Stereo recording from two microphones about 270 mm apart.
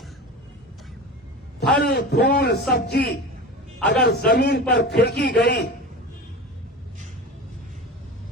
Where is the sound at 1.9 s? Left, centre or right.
Left.